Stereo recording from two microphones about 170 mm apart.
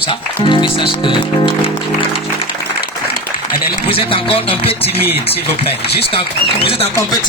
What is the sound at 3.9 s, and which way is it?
Speech, 30° left (ahead or behind).